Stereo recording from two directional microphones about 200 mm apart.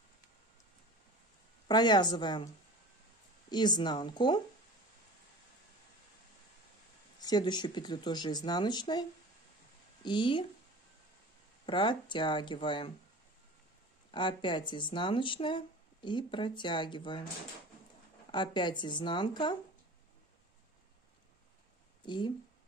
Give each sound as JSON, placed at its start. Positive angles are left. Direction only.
{"t": 1.7, "sound": "speech", "side_deg": 20}
{"t": 7.2, "sound": "speech", "side_deg": 20}
{"t": 10.0, "sound": "speech", "side_deg": 25}
{"t": 11.6, "sound": "speech", "side_deg": 25}
{"t": 14.1, "sound": "speech", "side_deg": 25}
{"t": 18.3, "sound": "speech", "side_deg": 25}
{"t": 22.0, "sound": "speech", "side_deg": 25}